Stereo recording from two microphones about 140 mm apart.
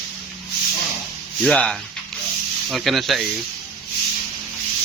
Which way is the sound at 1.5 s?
5° left (ahead or behind).